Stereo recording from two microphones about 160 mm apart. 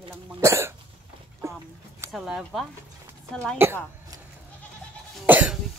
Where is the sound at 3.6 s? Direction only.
15° right (ahead or behind).